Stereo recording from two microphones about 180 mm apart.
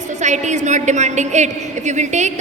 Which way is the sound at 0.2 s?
40° right (ahead or behind).